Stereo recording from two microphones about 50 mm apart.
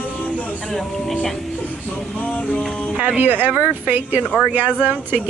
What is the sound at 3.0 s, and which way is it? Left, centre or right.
Speech, right.